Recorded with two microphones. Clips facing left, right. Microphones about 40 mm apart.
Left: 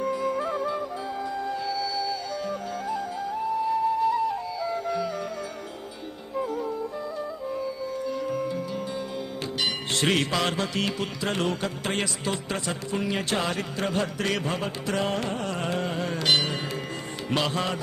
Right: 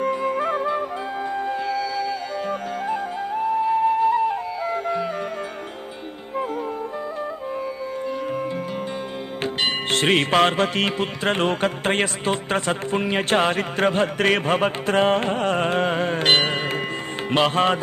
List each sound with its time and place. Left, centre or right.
0.0 s music: right
9.4 s music: right